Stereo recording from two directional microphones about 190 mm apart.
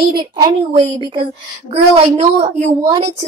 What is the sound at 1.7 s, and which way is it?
A woman's voice, 35° right (ahead or behind).